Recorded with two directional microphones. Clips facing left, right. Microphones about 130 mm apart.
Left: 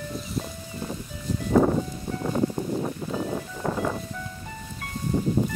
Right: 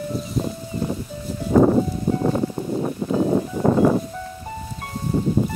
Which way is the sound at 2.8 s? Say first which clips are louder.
Right 7 dB; 30° right (ahead or behind).